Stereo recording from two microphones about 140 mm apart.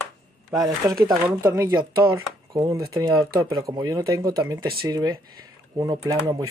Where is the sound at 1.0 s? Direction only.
20° right (ahead or behind).